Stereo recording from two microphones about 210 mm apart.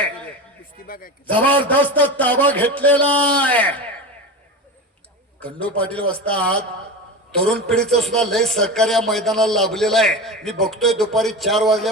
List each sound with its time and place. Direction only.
0.6 s a sound: 40° left (ahead or behind)
1.3 s a man's voice: 10° left (ahead or behind)
5.4 s a man's voice: 5° left (ahead or behind)